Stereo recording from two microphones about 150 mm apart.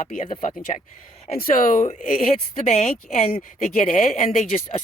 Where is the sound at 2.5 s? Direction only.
45° left (ahead or behind).